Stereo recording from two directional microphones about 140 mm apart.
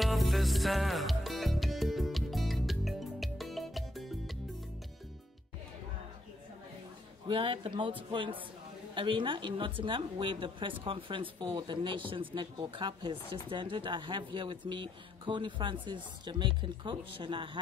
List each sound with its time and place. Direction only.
0.0 s music: centre (ahead or behind)
7.2 s a woman's voice: 40° right (ahead or behind)